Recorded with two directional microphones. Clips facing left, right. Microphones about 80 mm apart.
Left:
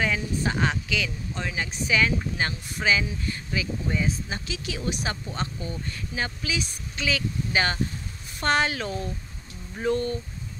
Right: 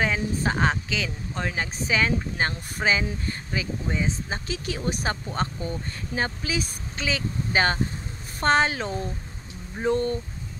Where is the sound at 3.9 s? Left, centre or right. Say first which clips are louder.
Right 1 dB; right.